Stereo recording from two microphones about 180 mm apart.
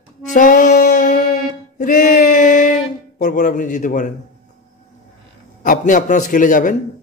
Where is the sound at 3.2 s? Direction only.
45° left (ahead or behind).